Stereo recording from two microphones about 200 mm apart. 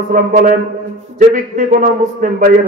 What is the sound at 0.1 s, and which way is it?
Speech, 40° right (ahead or behind).